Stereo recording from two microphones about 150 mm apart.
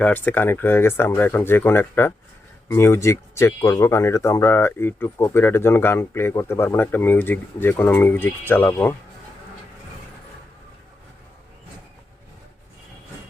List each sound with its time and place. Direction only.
0.0 s speech: 10° left (ahead or behind)